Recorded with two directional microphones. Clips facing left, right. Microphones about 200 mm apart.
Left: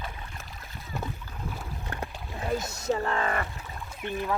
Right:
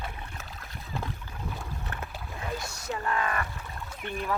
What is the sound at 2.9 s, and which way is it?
Speech, 30° left (ahead or behind).